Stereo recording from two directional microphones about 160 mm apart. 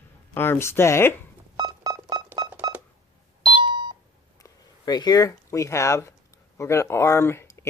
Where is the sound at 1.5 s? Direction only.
25° right (ahead or behind).